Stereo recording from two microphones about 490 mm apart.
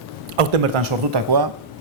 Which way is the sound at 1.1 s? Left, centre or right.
Right.